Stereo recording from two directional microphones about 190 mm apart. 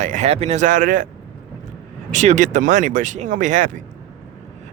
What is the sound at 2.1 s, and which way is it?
Speech, 40° right (ahead or behind).